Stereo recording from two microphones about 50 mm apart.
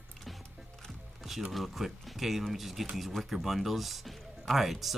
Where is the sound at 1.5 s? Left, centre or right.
Centre.